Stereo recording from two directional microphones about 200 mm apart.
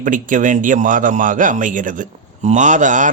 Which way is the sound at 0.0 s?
40° right (ahead or behind).